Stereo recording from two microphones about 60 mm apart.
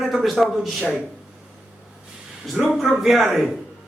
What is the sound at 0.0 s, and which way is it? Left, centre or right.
Speech, centre.